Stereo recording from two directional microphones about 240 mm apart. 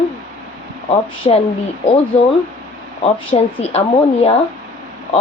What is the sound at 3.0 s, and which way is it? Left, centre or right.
Speech, left.